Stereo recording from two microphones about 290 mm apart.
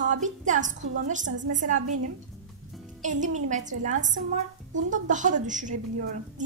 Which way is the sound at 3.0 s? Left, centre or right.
Right.